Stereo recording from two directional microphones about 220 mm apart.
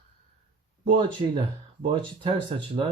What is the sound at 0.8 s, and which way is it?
Speech, 20° right (ahead or behind).